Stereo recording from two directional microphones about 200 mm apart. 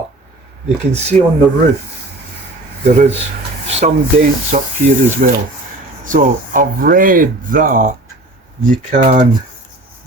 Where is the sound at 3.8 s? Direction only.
40° right (ahead or behind).